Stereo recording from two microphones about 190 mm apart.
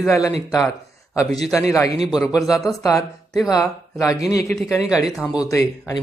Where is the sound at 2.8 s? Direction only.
15° left (ahead or behind).